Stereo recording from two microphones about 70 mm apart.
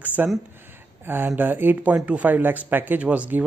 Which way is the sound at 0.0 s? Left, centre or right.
Right.